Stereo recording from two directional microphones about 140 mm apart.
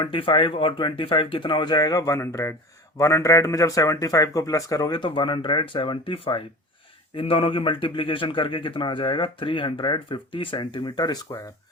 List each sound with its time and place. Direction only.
0.0 s a man's voice: 35° left (ahead or behind)